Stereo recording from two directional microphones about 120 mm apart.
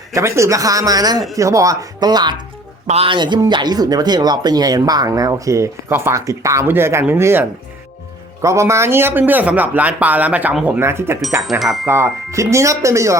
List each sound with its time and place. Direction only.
0.1 s speech: 25° right (ahead or behind)
2.8 s speech: 60° right (ahead or behind)
3.1 s speech: 40° right (ahead or behind); by 11.2 s 20° right (ahead or behind)
11.6 s speech: centre (ahead or behind)
11.9 s speech: 25° right (ahead or behind)